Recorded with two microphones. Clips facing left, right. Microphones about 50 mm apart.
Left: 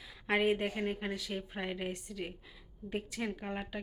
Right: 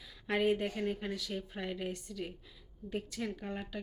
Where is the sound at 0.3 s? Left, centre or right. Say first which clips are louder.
Left 1 dB; centre.